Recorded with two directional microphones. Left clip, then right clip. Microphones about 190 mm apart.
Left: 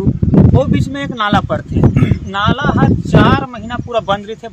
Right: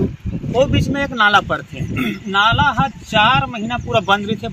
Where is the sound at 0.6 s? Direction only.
20° left (ahead or behind).